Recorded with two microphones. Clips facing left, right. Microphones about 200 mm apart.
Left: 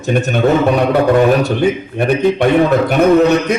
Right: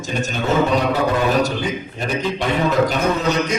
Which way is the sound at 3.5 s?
60° left (ahead or behind).